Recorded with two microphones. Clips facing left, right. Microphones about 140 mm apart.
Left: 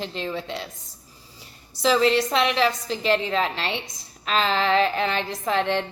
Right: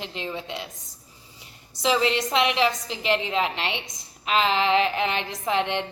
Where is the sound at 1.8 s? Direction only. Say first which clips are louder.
Left 3 dB; 20° right (ahead or behind).